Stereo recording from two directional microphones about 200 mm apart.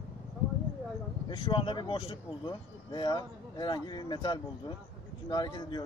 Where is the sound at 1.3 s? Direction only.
25° left (ahead or behind).